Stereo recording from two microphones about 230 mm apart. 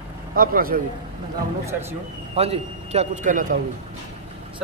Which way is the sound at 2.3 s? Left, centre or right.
Right.